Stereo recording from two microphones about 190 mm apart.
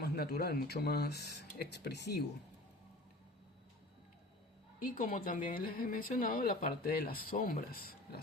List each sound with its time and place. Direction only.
0.0 s speech: 55° left (ahead or behind)
4.8 s speech: 45° left (ahead or behind)